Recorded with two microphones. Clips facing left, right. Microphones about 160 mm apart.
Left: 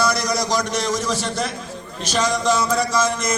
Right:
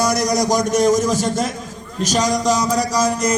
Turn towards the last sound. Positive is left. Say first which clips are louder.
# right 3 dB
turn(degrees=-40)  # may be behind; listen again after turning